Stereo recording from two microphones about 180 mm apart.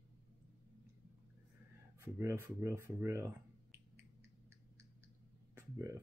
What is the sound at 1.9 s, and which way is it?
A woman's voice, 15° right (ahead or behind).